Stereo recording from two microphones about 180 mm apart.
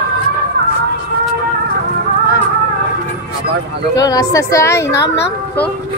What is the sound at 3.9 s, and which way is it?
A woman's voice, 20° left (ahead or behind).